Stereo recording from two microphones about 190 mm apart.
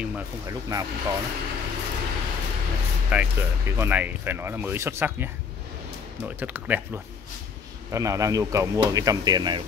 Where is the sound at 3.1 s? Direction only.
10° right (ahead or behind).